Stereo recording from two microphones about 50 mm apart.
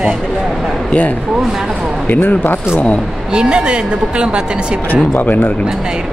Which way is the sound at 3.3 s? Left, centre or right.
Centre.